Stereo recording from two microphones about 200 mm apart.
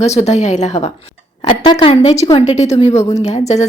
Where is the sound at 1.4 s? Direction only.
25° left (ahead or behind).